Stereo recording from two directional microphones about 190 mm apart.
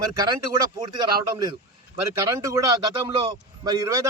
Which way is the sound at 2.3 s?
15° right (ahead or behind).